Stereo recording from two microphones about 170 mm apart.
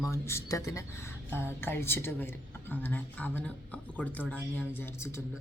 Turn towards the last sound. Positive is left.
turn(degrees=15)  # may be behind; listen again after turning